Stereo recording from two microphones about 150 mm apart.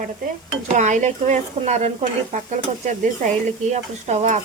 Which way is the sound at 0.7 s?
55° right (ahead or behind).